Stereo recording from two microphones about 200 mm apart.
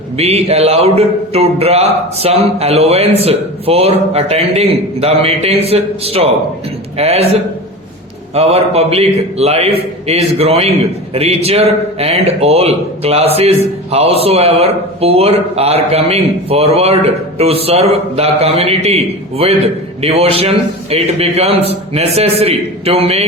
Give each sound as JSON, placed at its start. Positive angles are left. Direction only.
{"t": 0.2, "sound": "a man's voice", "side_deg": -30}
{"t": 8.4, "sound": "speech", "side_deg": -30}